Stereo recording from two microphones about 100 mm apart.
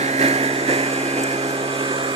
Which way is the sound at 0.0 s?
90° right.